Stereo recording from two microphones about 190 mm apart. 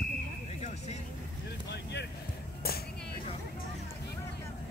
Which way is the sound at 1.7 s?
60° left (ahead or behind).